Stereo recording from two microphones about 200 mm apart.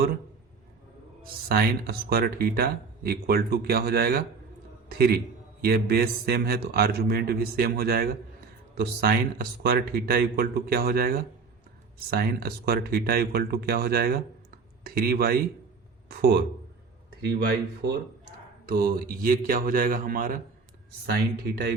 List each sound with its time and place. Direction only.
1.2 s speech: 50° right (ahead or behind)